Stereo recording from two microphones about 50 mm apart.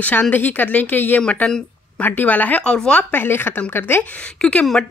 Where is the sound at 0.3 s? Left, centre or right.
Left.